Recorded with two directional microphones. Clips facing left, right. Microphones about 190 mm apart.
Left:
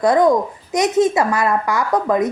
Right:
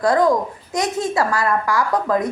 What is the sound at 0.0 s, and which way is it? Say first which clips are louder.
A child's voice: left 2 dB; 20° left (ahead or behind).